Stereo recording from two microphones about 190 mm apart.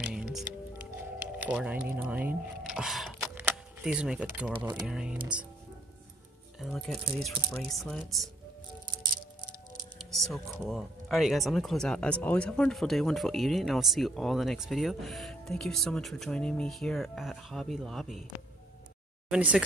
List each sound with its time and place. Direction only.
0.0 s music: 5° right (ahead or behind)
3.2 s camera: 5° right (ahead or behind)
4.6 s speech: 25° right (ahead or behind)
4.8 s speech: 5° right (ahead or behind)
6.6 s speech: centre (ahead or behind)
10.2 s speech: centre (ahead or behind)
19.3 s speech: 5° right (ahead or behind)